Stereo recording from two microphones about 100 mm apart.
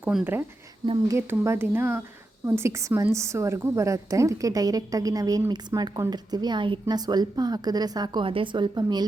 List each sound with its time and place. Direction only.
0.1 s speech: 5° right (ahead or behind)
1.0 s a woman's voice: 25° right (ahead or behind); by 9.0 s 45° right (ahead or behind)